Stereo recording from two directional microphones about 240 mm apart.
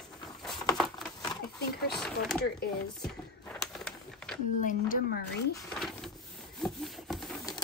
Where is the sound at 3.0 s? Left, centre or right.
Centre.